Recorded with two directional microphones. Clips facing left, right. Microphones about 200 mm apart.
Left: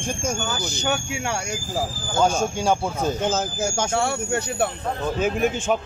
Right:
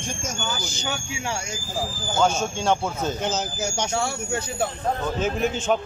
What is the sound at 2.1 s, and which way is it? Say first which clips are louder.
Speech: left 2 dB; 10° left (ahead or behind).